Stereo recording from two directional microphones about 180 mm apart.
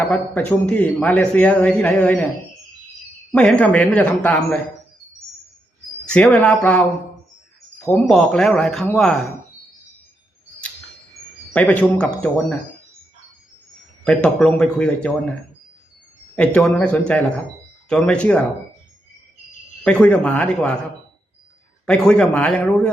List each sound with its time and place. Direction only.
0.0 s speech: 5° left (ahead or behind)
3.3 s speech: 5° left (ahead or behind)
6.1 s speech: 5° left (ahead or behind)
7.9 s speech: 5° left (ahead or behind)
11.5 s speech: 5° left (ahead or behind)
14.0 s speech: 5° left (ahead or behind)
16.6 s speech: 5° left (ahead or behind)
19.8 s speech: 5° left (ahead or behind)
21.8 s speech: 5° left (ahead or behind)